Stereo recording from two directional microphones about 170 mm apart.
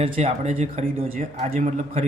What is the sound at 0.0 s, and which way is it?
Speech, 35° right (ahead or behind).